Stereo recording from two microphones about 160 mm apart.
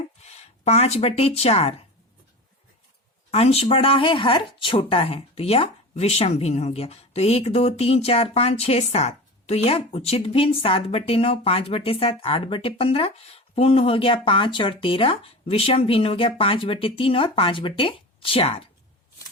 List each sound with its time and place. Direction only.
0.2 s speech: 40° left (ahead or behind)
3.3 s speech: 40° left (ahead or behind)